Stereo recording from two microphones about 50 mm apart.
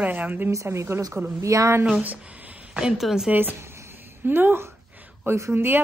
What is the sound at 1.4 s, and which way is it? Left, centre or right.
Speech, right.